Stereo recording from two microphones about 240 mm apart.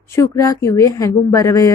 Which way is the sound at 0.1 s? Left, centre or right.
Centre.